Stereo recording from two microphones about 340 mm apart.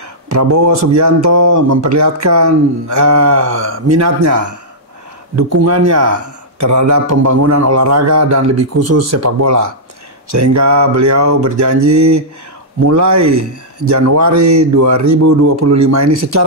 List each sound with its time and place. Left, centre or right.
0.3 s speech: right